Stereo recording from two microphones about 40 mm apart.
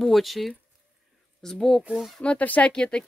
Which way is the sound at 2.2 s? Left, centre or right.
Left.